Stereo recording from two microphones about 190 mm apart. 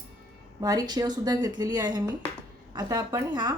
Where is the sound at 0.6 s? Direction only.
20° right (ahead or behind).